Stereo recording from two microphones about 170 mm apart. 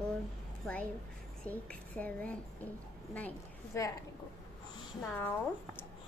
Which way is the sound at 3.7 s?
15° left (ahead or behind).